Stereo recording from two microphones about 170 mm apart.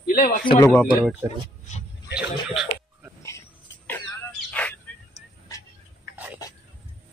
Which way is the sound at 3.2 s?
15° left (ahead or behind).